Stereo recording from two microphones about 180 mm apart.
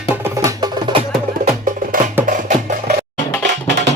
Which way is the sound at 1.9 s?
50° right (ahead or behind).